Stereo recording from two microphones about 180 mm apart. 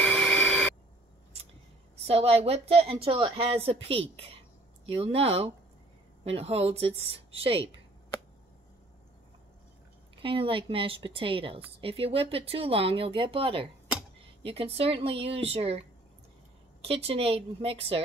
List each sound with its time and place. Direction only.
0.0 s vacuum cleaner: 5° left (ahead or behind)
2.0 s a woman's voice: 35° right (ahead or behind)
10.2 s a woman's voice: 30° right (ahead or behind)
16.8 s a woman's voice: 30° right (ahead or behind)